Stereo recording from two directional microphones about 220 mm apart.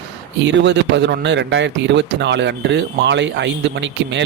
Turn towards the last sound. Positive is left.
turn(degrees=-55)  # may be behind; listen again after turning